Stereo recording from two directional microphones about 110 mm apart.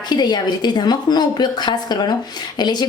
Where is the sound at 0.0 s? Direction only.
40° left (ahead or behind).